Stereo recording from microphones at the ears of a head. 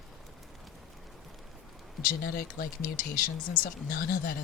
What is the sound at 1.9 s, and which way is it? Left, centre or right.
Speech, left.